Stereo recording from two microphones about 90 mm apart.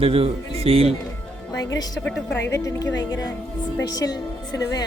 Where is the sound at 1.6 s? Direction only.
45° left (ahead or behind).